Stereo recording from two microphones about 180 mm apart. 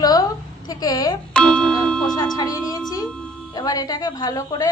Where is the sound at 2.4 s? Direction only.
20° left (ahead or behind).